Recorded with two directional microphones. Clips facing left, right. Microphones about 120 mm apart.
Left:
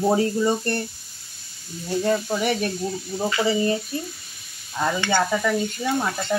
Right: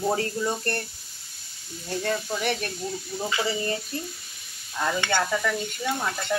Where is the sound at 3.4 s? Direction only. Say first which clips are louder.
Left 7 dB; 15° left (ahead or behind).